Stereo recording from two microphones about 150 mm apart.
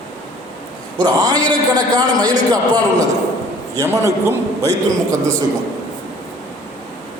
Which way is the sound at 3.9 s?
20° right (ahead or behind).